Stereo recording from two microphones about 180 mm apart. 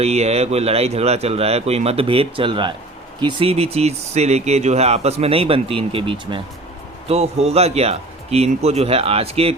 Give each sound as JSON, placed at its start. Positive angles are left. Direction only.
{"t": 0.0, "sound": "speech", "side_deg": -35}